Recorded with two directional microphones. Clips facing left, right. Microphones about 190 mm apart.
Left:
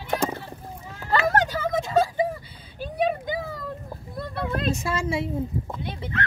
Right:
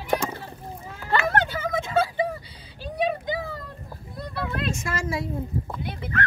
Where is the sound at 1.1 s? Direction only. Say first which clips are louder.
Left 1 dB; 40° left (ahead or behind).